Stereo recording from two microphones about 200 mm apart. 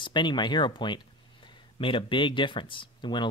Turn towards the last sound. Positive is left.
turn(degrees=25)  # may be behind; listen again after turning